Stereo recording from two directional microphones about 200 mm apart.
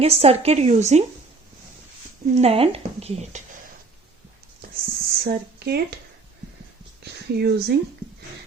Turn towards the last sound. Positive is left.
turn(degrees=-55)  # may be behind; listen again after turning